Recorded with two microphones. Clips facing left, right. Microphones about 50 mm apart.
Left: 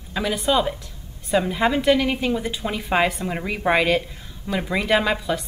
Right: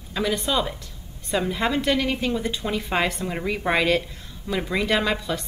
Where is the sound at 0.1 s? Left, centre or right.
Centre.